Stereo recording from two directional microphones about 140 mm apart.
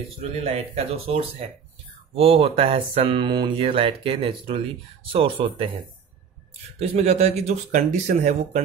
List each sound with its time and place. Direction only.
0.2 s speech: 45° right (ahead or behind)
6.8 s speech: 45° right (ahead or behind)